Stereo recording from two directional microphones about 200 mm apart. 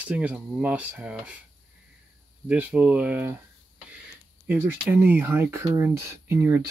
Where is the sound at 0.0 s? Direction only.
5° right (ahead or behind).